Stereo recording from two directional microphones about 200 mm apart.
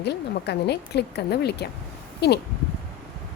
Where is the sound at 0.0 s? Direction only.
55° left (ahead or behind).